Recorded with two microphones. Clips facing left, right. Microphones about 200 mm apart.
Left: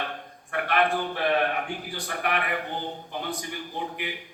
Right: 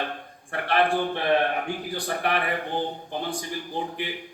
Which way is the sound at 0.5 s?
30° right (ahead or behind).